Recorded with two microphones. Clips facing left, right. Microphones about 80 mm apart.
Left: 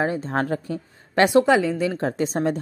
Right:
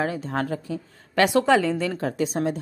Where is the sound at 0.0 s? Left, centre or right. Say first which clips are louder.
Left 3 dB; left.